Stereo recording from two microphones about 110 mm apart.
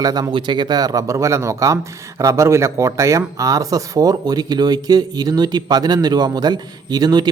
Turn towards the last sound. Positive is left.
turn(degrees=-40)  # may be behind; listen again after turning